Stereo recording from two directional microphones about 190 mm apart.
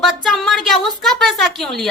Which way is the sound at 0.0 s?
Centre (ahead or behind).